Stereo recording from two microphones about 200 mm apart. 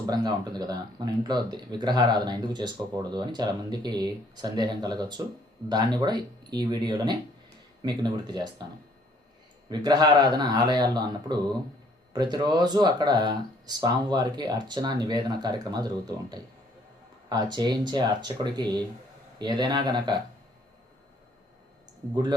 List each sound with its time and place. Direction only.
0.1 s speech: 20° right (ahead or behind)
9.6 s speech: 20° right (ahead or behind)
22.1 s speech: 20° right (ahead or behind)